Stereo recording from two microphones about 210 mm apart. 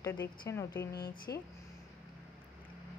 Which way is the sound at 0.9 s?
50° left (ahead or behind).